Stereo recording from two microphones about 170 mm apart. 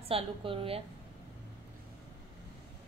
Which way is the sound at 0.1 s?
30° right (ahead or behind).